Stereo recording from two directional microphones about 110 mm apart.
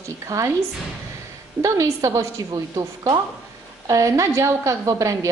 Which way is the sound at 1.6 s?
30° right (ahead or behind).